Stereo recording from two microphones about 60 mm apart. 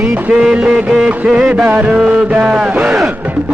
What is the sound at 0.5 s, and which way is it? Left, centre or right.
Music, centre.